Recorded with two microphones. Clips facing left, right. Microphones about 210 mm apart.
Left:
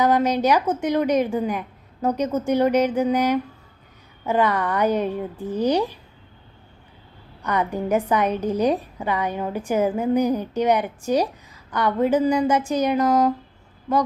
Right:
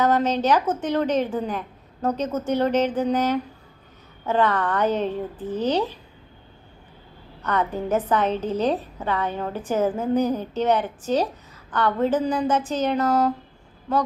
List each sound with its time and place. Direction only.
0.0 s a woman's voice: 10° left (ahead or behind)
7.4 s a woman's voice: 10° left (ahead or behind)